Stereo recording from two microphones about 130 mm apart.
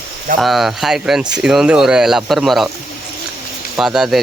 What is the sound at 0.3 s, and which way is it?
Speech, centre (ahead or behind).